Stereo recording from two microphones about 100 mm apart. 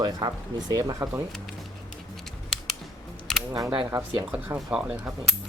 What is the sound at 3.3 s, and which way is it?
Camera, 5° left (ahead or behind).